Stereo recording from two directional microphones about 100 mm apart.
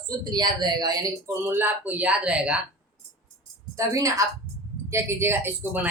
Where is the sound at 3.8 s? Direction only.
35° right (ahead or behind).